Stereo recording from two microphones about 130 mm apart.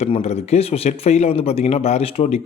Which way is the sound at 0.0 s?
55° left (ahead or behind).